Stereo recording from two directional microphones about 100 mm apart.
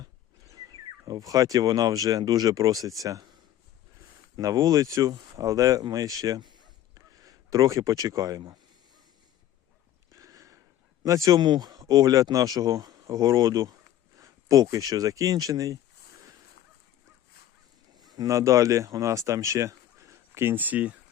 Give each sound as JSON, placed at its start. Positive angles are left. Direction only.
{"t": 0.0, "sound": "speech", "side_deg": -40}
{"t": 4.4, "sound": "speech", "side_deg": -35}
{"t": 10.1, "sound": "a sound", "side_deg": -35}
{"t": 11.0, "sound": "speech", "side_deg": -35}
{"t": 18.0, "sound": "speech", "side_deg": -40}